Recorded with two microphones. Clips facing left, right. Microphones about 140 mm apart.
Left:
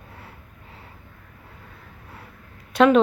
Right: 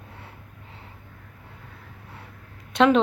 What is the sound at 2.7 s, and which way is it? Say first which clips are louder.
Speech: left 3 dB; 25° right (ahead or behind).